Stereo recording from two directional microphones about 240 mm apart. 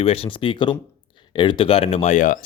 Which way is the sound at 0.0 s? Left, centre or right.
Left.